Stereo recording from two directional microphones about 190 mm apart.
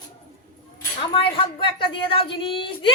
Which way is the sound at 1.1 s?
25° left (ahead or behind).